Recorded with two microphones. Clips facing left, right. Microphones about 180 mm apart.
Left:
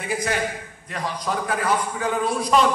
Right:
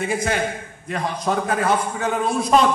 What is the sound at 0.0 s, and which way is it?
A man's voice, 25° right (ahead or behind).